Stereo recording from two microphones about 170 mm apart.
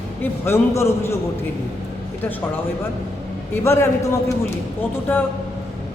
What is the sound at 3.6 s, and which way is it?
Speech, 15° left (ahead or behind).